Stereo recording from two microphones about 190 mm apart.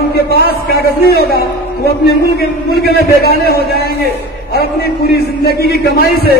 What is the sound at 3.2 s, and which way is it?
Speech, 55° left (ahead or behind).